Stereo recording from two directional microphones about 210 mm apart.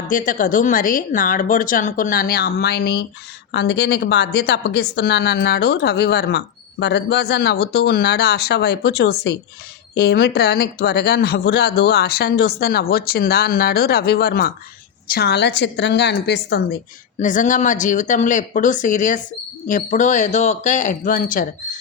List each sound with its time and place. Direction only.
0.1 s a woman's voice: 40° left (ahead or behind)